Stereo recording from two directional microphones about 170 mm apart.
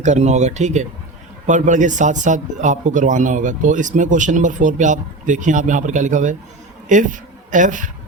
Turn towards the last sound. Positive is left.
turn(degrees=-50)  # may be behind; listen again after turning